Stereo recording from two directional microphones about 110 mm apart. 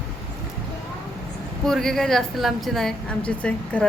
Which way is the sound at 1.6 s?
5° left (ahead or behind).